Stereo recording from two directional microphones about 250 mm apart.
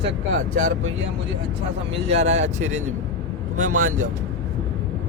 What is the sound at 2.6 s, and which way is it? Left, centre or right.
Speech, right.